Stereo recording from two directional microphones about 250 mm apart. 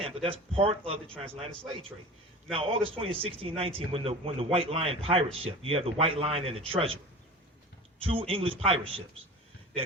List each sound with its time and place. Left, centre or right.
0.0 s a man's voice: right
1.0 s a man's voice: centre
2.5 s a man's voice: right